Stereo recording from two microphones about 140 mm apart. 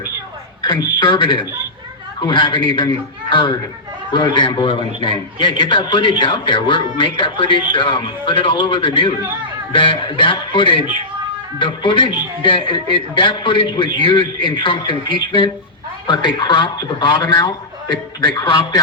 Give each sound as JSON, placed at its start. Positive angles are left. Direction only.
{"t": 0.6, "sound": "a man's voice", "side_deg": 35}